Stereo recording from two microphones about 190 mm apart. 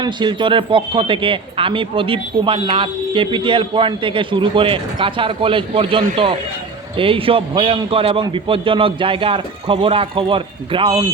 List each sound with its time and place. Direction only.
0.0 s speech: 25° right (ahead or behind)